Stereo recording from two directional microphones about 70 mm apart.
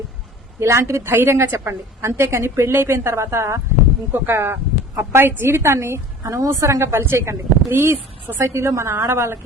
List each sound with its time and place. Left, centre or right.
0.6 s a woman's voice: right